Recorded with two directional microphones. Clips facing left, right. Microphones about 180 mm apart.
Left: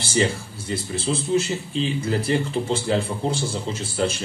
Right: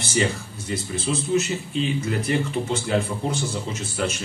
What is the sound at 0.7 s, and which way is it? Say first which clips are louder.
Speech: left 1 dB; 30° left (ahead or behind).